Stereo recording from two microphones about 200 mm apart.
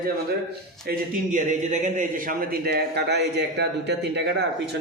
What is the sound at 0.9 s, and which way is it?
A man's voice, 40° right (ahead or behind).